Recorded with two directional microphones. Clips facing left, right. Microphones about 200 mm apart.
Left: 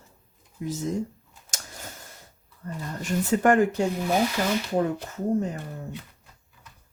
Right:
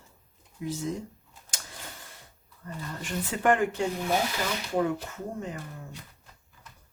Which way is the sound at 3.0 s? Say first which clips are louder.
Left 5 dB; 45° left (ahead or behind).